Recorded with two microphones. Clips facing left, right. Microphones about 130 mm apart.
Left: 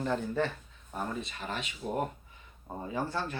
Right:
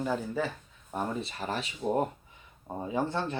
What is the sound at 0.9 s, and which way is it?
Speech, 30° right (ahead or behind).